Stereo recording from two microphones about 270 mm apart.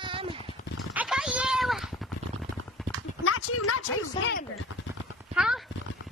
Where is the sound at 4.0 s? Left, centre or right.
Left.